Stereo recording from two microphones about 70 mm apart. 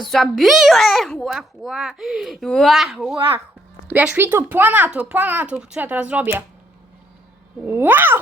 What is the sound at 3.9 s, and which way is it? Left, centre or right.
Speech, right.